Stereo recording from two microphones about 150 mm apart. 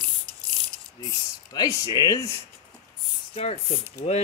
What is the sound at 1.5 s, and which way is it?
Speech, 25° left (ahead or behind).